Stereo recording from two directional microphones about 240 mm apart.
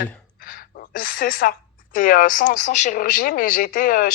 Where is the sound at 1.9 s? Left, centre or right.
Left.